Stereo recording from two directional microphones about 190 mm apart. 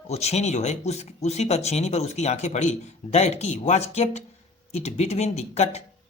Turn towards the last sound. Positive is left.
turn(degrees=35)  # may be behind; listen again after turning